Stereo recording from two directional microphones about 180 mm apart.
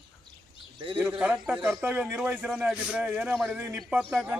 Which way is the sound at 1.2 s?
10° right (ahead or behind).